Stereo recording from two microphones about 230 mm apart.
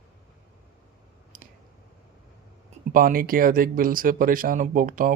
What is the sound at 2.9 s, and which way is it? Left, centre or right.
Speech, right.